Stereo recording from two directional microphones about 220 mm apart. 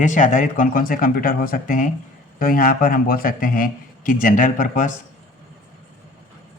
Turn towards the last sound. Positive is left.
turn(degrees=35)  # may be behind; listen again after turning